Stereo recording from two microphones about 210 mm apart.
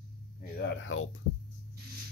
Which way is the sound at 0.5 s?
55° left (ahead or behind).